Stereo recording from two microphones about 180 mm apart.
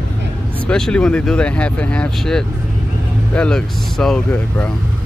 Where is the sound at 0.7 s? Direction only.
5° left (ahead or behind).